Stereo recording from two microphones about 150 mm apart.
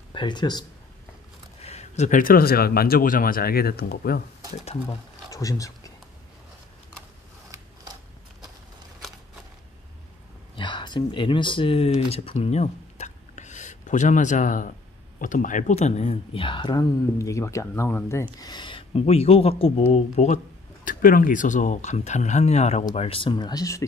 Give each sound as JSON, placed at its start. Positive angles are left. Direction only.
{"t": 0.1, "sound": "speech", "side_deg": 30}
{"t": 1.6, "sound": "speech", "side_deg": 45}
{"t": 5.3, "sound": "speech", "side_deg": 20}
{"t": 7.5, "sound": "scissors", "side_deg": -25}
{"t": 10.5, "sound": "speech", "side_deg": 30}
{"t": 20.8, "sound": "speech", "side_deg": 65}
{"t": 22.9, "sound": "speech", "side_deg": 40}